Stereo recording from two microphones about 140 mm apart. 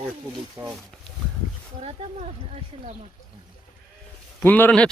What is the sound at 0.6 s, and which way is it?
Speech, 20° right (ahead or behind).